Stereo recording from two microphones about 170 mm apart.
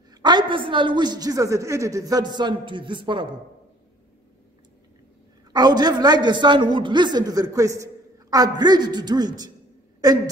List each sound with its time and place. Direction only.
0.1 s a man's voice: 25° right (ahead or behind)
5.5 s a man's voice: 25° right (ahead or behind)